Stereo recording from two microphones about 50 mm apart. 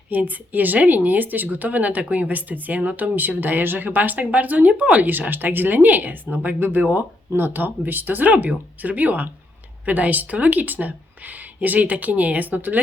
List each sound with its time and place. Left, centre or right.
0.1 s speech: right